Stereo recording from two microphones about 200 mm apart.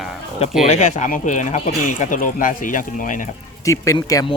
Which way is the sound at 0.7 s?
35° left (ahead or behind).